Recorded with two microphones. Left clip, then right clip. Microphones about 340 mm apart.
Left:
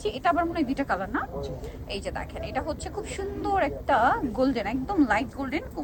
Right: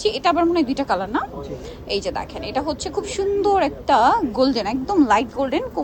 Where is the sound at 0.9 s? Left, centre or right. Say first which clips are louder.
Right 7 dB; left.